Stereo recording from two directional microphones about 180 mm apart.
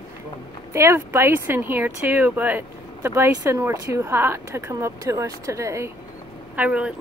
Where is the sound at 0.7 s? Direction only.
15° right (ahead or behind).